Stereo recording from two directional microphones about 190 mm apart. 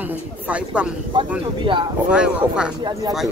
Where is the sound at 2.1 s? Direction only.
5° right (ahead or behind).